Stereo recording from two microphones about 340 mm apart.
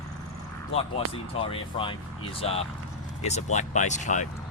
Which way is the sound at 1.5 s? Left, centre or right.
Centre.